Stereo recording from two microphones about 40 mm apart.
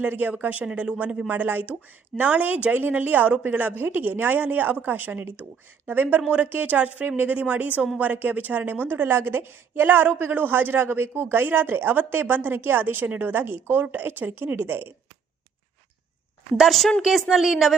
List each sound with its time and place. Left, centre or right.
0.0 s speech: right
0.6 s speech: right
0.9 s a woman's voice: right
17.0 s a woman's voice: centre